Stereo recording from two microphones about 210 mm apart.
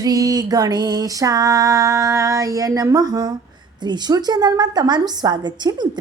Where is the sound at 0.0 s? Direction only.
15° right (ahead or behind).